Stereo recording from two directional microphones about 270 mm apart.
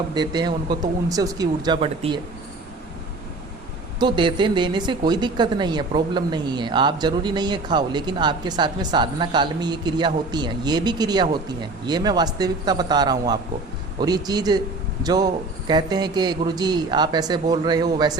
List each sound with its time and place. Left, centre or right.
0.1 s speech: centre
4.0 s speech: centre